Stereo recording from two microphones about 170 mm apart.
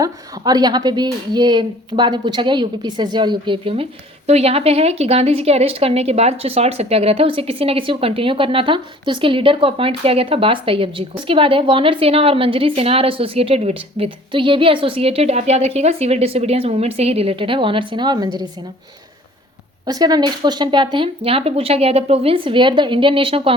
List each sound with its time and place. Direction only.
0.0 s a woman's voice: 25° right (ahead or behind)
19.8 s a woman's voice: 25° right (ahead or behind)